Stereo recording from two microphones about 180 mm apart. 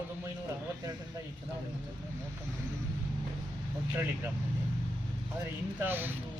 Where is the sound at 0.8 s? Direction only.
20° right (ahead or behind).